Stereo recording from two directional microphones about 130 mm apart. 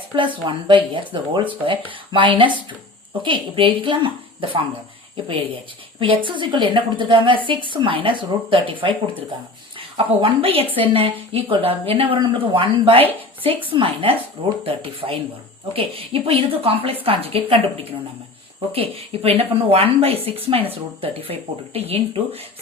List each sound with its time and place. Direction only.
0.2 s speech: 40° right (ahead or behind)
6.0 s a woman's voice: 40° right (ahead or behind)